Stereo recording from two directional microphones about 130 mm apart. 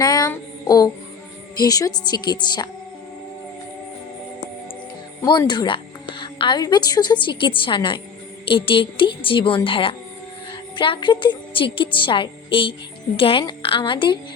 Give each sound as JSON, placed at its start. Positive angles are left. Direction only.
{"t": 0.0, "sound": "a sound", "side_deg": 30}
{"t": 1.5, "sound": "a woman's voice", "side_deg": 30}
{"t": 5.5, "sound": "a woman's voice", "side_deg": 40}